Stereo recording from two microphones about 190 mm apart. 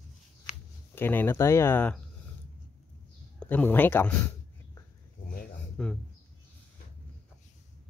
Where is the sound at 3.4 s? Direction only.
10° left (ahead or behind).